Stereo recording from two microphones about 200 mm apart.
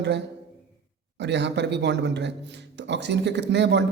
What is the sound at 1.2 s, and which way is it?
A man's voice, 60° right (ahead or behind).